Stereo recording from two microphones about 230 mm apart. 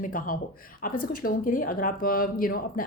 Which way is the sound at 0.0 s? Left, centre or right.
Left.